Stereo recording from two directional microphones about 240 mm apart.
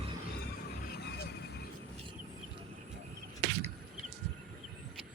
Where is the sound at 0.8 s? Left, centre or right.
Left.